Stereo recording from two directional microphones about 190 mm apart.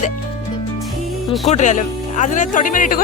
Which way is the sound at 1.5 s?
40° left (ahead or behind).